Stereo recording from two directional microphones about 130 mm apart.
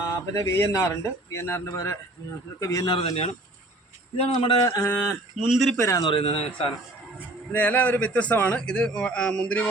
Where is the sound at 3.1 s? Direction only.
55° left (ahead or behind).